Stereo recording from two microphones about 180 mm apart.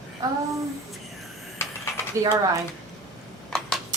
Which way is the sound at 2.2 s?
15° right (ahead or behind).